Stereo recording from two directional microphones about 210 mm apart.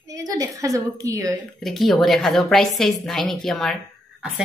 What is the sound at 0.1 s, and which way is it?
A woman's voice, 15° right (ahead or behind).